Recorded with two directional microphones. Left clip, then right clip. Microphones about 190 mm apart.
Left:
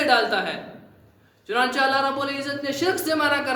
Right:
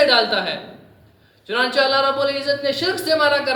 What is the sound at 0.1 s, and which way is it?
A woman's voice, 25° left (ahead or behind).